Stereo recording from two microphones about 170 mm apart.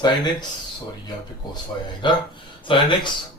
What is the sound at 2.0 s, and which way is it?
Speech, 30° left (ahead or behind).